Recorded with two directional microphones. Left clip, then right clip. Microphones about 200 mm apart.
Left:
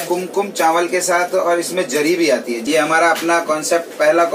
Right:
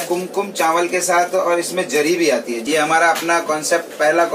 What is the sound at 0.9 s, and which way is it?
A man's voice, centre (ahead or behind).